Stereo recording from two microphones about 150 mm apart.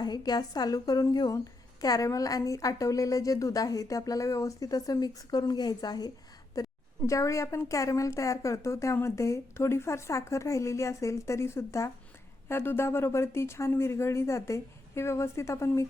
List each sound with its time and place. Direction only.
0.0 s a woman's voice: 25° left (ahead or behind)
6.6 s a sound: 25° left (ahead or behind)
7.1 s a woman's voice: 20° left (ahead or behind)